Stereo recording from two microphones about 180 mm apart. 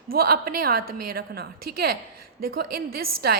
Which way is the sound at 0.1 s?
55° right (ahead or behind).